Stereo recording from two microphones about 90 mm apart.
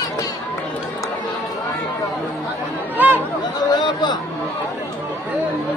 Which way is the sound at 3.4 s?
55° left (ahead or behind).